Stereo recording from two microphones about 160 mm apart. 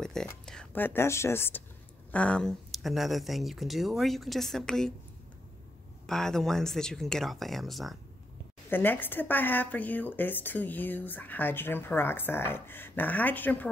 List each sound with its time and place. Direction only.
0.0 s speech: 5° left (ahead or behind)
6.0 s speech: 5° left (ahead or behind)
8.6 s speech: 10° left (ahead or behind)